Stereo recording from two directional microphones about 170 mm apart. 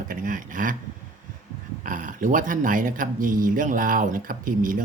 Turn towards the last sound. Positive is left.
turn(degrees=-55)  # may be behind; listen again after turning